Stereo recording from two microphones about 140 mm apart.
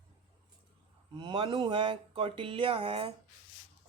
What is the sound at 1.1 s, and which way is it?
A man's voice, 35° right (ahead or behind).